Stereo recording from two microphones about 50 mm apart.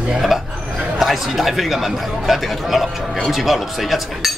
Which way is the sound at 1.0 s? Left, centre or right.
Centre.